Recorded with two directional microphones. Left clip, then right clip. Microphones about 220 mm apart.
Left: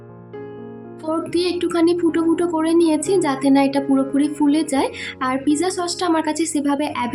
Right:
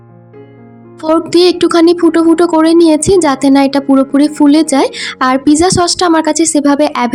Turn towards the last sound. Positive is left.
turn(degrees=-35)  # may be behind; listen again after turning